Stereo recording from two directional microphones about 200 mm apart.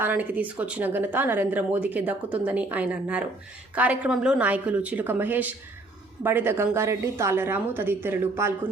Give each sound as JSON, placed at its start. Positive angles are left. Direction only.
{"t": 0.0, "sound": "speech", "side_deg": -10}